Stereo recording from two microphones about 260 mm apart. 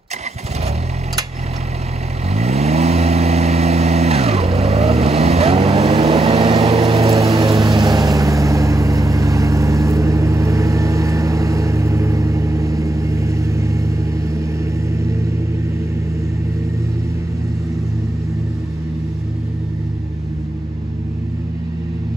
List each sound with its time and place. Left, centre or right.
2.3 s vehicle: right